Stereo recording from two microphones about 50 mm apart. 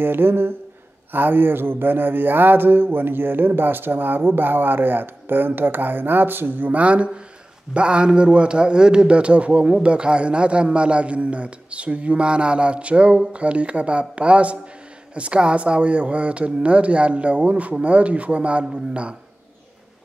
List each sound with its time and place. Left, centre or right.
0.0 s mantra: right
6.7 s a man's voice: right